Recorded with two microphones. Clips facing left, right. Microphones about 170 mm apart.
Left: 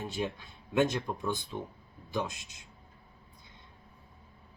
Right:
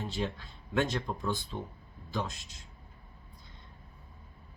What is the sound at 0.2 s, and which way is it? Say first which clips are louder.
Speech: left 1 dB; 10° left (ahead or behind).